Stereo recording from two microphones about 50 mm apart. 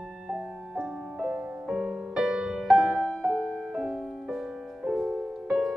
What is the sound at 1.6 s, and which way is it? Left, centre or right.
Music, centre.